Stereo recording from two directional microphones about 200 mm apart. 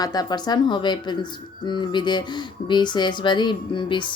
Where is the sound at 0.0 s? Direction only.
20° left (ahead or behind).